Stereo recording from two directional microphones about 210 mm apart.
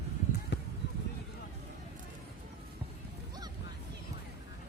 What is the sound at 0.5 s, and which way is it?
Basketball bounce, 55° left (ahead or behind).